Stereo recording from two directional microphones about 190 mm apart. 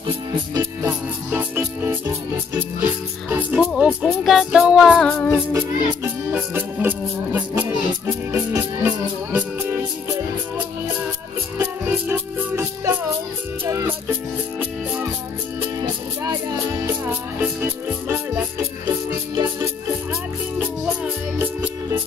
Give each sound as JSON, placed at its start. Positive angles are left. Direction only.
{"t": 0.6, "sound": "music", "side_deg": -10}
{"t": 5.5, "sound": "music", "side_deg": -15}
{"t": 11.5, "sound": "music", "side_deg": -10}
{"t": 16.8, "sound": "music", "side_deg": -10}
{"t": 20.1, "sound": "music", "side_deg": -5}